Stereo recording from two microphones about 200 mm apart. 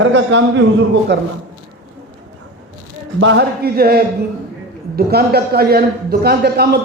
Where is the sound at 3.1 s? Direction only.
65° right (ahead or behind).